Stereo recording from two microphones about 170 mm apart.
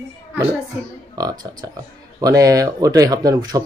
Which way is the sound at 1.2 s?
20° right (ahead or behind).